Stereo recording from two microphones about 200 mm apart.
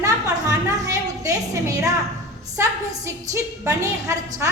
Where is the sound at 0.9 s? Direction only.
15° right (ahead or behind).